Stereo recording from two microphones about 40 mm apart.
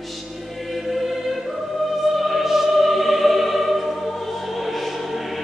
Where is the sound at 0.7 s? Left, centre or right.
Centre.